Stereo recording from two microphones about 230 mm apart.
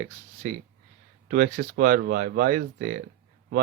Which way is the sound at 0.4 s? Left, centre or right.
Right.